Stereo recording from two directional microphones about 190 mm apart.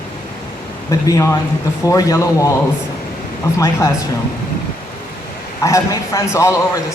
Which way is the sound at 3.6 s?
15° left (ahead or behind).